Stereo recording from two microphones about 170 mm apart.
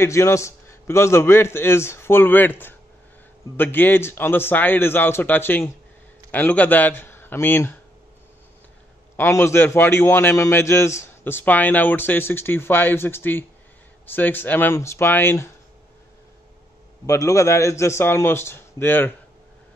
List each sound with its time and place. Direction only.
0.0 s a man's voice: 15° left (ahead or behind)
9.1 s a man's voice: 15° left (ahead or behind)
17.0 s a man's voice: 20° left (ahead or behind)